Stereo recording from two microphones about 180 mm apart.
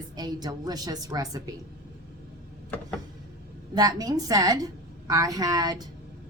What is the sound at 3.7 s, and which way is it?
A woman's voice, 20° right (ahead or behind).